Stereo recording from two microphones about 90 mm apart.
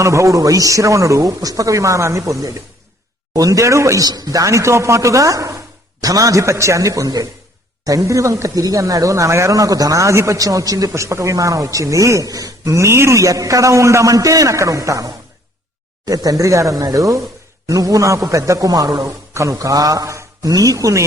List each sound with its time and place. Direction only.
0.0 s a man's voice: 35° right (ahead or behind)